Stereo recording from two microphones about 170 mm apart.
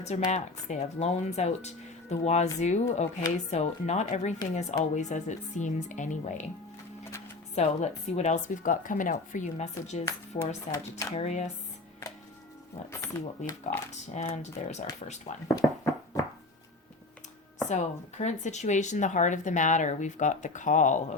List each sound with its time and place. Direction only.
0.3 s speech: 45° left (ahead or behind)
7.5 s speech: 40° left (ahead or behind)
11.1 s speech: 40° left (ahead or behind)
12.9 s speech: 15° left (ahead or behind)
13.7 s speech: 45° left (ahead or behind)
15.4 s a sound: 20° left (ahead or behind)
17.7 s speech: 45° left (ahead or behind)